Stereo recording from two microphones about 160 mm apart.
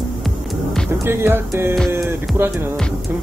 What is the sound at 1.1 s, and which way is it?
Speech, 15° right (ahead or behind).